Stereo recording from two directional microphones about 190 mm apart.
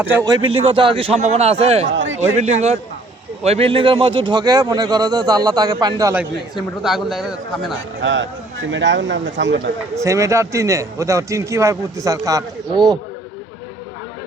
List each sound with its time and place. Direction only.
0.0 s a man's voice: 15° right (ahead or behind)
0.5 s a man's voice: 30° right (ahead or behind)
1.9 s speech: 75° right (ahead or behind)
2.4 s a man's voice: 35° right (ahead or behind); by 6.2 s 15° right (ahead or behind)
6.6 s a man's voice: centre (ahead or behind)
7.8 s speech: 75° right (ahead or behind)
9.9 s a man's voice: 15° right (ahead or behind)